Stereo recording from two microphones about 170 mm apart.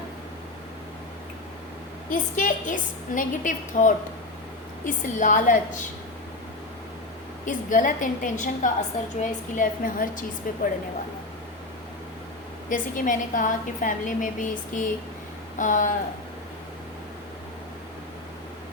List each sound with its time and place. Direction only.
2.0 s a woman's voice: 50° left (ahead or behind)
7.4 s a woman's voice: 50° left (ahead or behind)
12.6 s a woman's voice: 50° left (ahead or behind)